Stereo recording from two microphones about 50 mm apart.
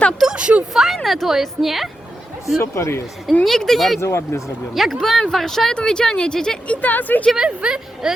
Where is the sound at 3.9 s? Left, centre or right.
Left.